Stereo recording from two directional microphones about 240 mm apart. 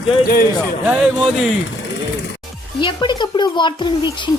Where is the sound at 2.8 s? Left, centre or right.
Centre.